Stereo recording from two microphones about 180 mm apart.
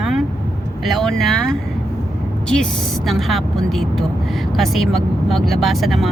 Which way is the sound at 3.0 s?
Centre (ahead or behind).